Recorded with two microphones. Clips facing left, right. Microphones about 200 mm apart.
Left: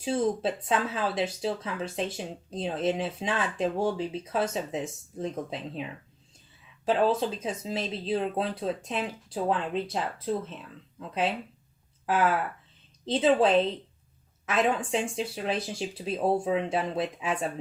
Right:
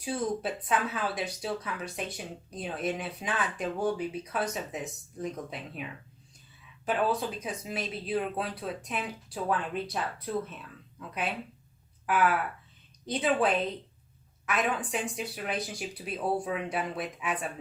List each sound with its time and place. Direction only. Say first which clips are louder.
0.0 s speech: left 5 dB; 25° left (ahead or behind)
6.8 s speech: left 4 dB; 25° left (ahead or behind)
12.0 s speech: left 1 dB; 25° left (ahead or behind)